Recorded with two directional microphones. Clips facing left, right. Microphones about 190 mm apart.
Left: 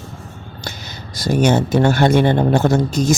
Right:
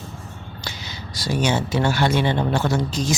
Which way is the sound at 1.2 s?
50° left (ahead or behind).